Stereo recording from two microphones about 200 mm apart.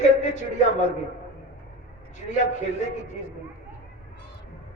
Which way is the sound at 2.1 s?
35° left (ahead or behind).